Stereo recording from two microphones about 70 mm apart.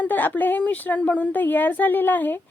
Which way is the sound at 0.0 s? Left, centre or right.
Left.